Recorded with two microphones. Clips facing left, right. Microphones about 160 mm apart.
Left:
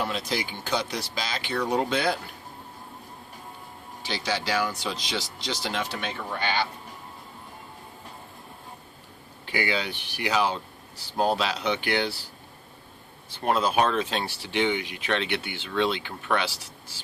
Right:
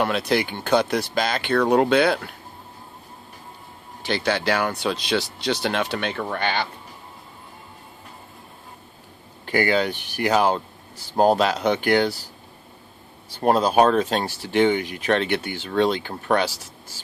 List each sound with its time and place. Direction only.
0.0 s speech: 65° right (ahead or behind)
4.0 s speech: 55° right (ahead or behind)
9.5 s speech: 50° right (ahead or behind)
13.3 s speech: 40° right (ahead or behind)